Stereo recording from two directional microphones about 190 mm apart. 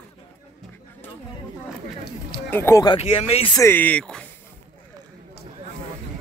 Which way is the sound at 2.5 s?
15° left (ahead or behind).